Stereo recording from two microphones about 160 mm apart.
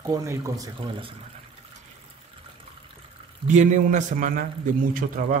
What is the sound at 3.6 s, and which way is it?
A man's voice, 50° right (ahead or behind).